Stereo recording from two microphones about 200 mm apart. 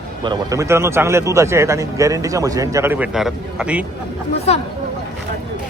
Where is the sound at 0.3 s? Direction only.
15° right (ahead or behind).